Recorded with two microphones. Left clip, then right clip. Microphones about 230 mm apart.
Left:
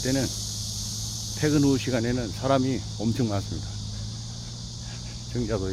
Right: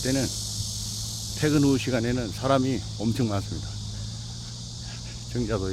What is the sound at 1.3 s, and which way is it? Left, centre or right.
Speech, centre.